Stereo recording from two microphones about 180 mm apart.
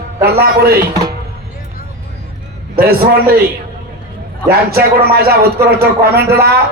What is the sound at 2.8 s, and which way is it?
Speech, 55° right (ahead or behind).